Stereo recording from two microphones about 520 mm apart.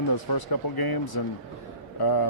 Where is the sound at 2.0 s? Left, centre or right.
Left.